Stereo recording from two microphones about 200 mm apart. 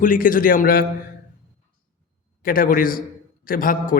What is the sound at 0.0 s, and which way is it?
Speech, 45° left (ahead or behind).